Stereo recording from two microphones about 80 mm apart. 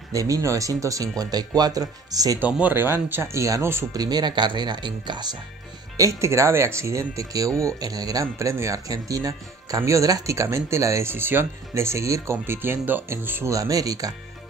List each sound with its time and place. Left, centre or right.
0.1 s speech: right
2.4 s speech: right
3.1 s speech: right
3.9 s speech: right
5.9 s speech: right
7.8 s speech: right
13.5 s speech: right